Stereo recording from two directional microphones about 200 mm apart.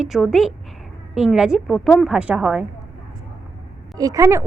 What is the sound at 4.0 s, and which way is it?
Speech, 15° right (ahead or behind).